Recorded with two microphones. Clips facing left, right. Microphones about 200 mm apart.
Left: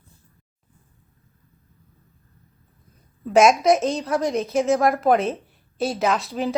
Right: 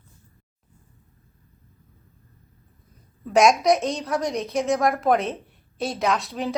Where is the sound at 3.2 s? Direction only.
Centre (ahead or behind).